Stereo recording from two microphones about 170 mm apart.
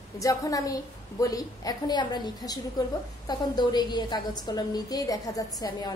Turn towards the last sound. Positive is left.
turn(degrees=20)  # may be behind; listen again after turning